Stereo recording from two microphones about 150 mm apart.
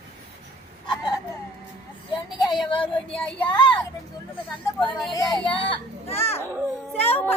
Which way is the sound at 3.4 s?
35° left (ahead or behind).